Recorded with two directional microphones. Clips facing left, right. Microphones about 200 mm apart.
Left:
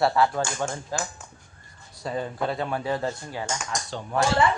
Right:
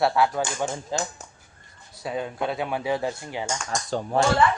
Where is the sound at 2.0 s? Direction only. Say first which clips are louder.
Even; 5° right (ahead or behind).